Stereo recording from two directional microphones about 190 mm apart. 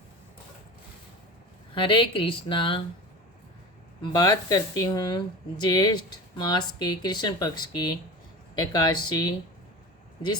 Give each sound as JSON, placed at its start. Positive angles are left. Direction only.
{"t": 1.7, "sound": "speech", "side_deg": 25}
{"t": 4.0, "sound": "speech", "side_deg": 20}